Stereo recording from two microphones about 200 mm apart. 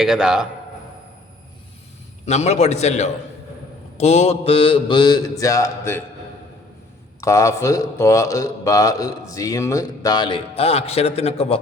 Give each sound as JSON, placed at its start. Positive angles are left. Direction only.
{"t": 0.0, "sound": "a man's voice", "side_deg": -5}
{"t": 2.2, "sound": "a man's voice", "side_deg": 35}
{"t": 3.9, "sound": "mantra", "side_deg": 30}
{"t": 7.2, "sound": "a man's voice", "side_deg": 15}